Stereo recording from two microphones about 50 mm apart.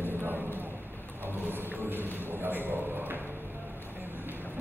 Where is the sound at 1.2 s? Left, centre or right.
Right.